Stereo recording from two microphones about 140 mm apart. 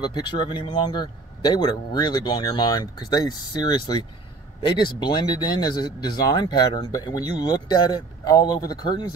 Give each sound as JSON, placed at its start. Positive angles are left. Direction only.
{"t": 0.0, "sound": "speech", "side_deg": 30}